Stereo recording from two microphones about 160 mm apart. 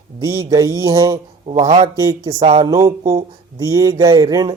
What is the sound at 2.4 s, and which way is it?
Speech, 40° right (ahead or behind).